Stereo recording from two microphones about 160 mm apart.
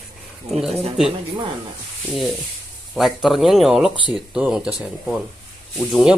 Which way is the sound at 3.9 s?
30° left (ahead or behind).